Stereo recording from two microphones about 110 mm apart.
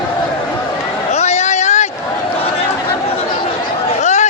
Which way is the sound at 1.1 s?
90° left.